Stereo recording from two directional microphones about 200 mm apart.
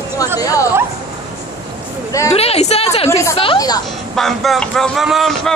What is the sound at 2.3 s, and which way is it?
Speech, 30° left (ahead or behind).